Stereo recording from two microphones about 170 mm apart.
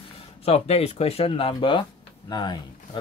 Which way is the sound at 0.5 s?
35° left (ahead or behind).